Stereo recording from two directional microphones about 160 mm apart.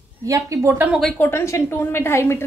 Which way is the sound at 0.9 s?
Centre (ahead or behind).